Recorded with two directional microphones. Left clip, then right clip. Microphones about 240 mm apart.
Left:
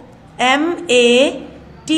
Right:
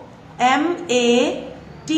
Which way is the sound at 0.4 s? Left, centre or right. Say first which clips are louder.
Left 2 dB; left.